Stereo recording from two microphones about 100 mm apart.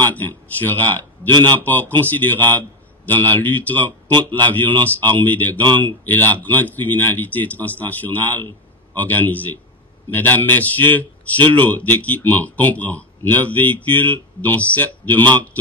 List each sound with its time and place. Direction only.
0.0 s a man's voice: 20° left (ahead or behind)